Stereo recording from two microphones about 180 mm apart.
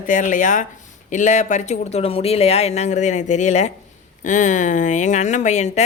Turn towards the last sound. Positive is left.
turn(degrees=40)  # may be behind; listen again after turning